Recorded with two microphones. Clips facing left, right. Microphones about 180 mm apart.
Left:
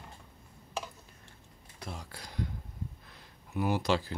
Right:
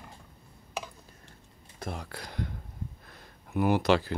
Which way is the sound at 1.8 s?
55° right (ahead or behind).